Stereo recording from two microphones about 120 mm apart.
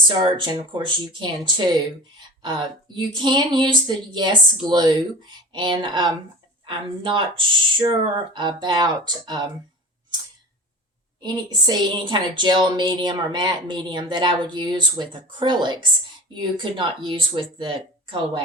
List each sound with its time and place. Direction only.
0.2 s a woman's voice: 40° right (ahead or behind)
11.2 s a woman's voice: 35° right (ahead or behind)